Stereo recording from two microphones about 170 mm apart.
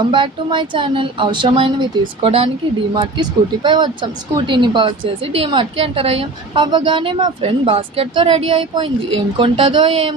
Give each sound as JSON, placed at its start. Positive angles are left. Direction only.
{"t": 0.1, "sound": "speech", "side_deg": -30}